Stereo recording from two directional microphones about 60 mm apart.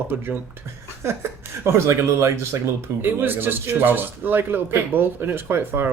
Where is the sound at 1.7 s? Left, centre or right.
Right.